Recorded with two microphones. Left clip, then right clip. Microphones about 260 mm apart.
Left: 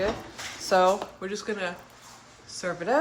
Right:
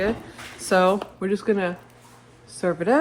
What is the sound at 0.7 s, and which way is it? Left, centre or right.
Speech, right.